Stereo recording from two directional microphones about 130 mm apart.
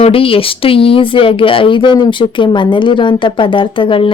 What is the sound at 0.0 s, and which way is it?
Speech, 45° left (ahead or behind).